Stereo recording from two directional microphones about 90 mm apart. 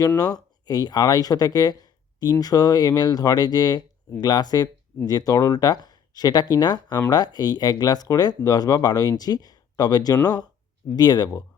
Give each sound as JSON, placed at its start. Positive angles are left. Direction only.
{"t": 0.2, "sound": "speech", "side_deg": 45}